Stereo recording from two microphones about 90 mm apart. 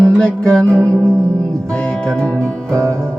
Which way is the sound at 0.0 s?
10° left (ahead or behind).